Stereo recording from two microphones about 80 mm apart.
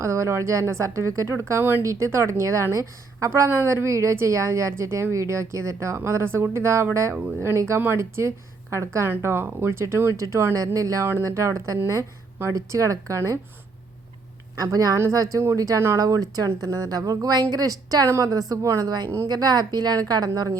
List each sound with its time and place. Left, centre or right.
0.0 s a woman's voice: right
14.6 s a woman's voice: right
18.9 s a woman's voice: right